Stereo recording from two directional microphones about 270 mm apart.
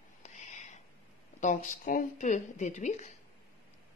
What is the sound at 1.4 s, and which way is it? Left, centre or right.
A woman's voice, left.